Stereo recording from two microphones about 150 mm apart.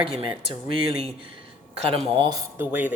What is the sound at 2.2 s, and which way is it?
Speech, 25° right (ahead or behind).